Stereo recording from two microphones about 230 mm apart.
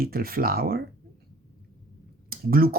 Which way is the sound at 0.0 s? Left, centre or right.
Right.